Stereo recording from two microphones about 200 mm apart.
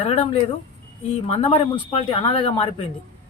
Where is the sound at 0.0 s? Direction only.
25° left (ahead or behind).